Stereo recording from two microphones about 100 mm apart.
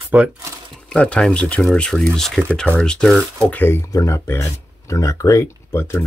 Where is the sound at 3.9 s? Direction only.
35° left (ahead or behind).